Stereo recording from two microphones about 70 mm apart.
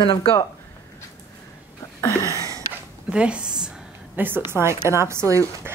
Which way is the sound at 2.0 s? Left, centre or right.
Left.